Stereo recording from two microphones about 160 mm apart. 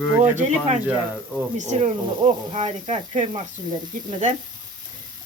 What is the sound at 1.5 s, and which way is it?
Speech, 35° right (ahead or behind).